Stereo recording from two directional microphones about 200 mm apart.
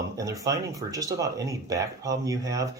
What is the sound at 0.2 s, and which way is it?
Speech, 15° right (ahead or behind).